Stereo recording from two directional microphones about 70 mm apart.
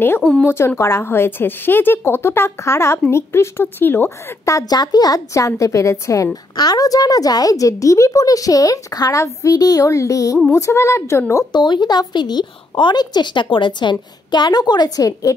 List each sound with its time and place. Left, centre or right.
0.5 s a woman's voice: left
4.5 s a woman's voice: left
4.7 s a woman's voice: left
5.3 s a woman's voice: left
6.5 s a woman's voice: left
11.5 s a woman's voice: left
15.3 s a woman's voice: left